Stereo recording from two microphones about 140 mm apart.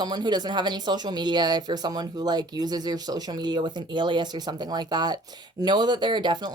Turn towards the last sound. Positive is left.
turn(degrees=-30)  # may be behind; listen again after turning